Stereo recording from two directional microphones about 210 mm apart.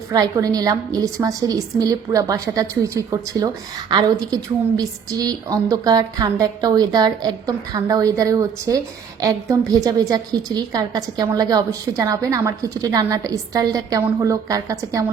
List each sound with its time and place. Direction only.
0.1 s a woman's voice: 15° right (ahead or behind)